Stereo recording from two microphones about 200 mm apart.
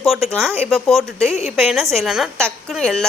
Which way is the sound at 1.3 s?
35° left (ahead or behind).